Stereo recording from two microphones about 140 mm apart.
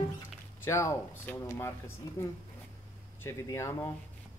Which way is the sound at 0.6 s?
20° left (ahead or behind).